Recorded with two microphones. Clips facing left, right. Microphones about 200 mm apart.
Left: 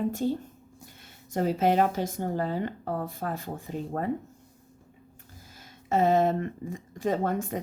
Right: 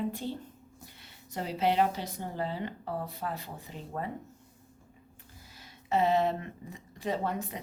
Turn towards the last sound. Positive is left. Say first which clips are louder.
# left 5 dB
turn(degrees=45)  # may be behind; listen again after turning